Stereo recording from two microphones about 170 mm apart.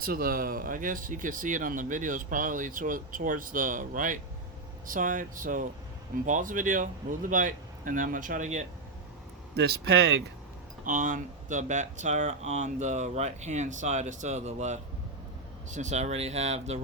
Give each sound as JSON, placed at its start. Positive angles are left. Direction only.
{"t": 0.0, "sound": "speech", "side_deg": -60}
{"t": 9.6, "sound": "speech", "side_deg": -70}
{"t": 10.8, "sound": "speech", "side_deg": -50}